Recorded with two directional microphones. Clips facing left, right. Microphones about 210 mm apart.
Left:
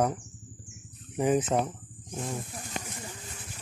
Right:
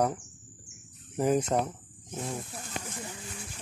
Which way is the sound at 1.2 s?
Centre (ahead or behind).